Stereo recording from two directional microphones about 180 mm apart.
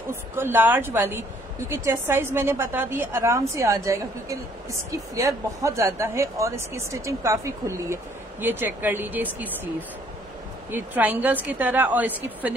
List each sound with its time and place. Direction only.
0.1 s speech: 10° right (ahead or behind)
10.7 s speech: 10° right (ahead or behind)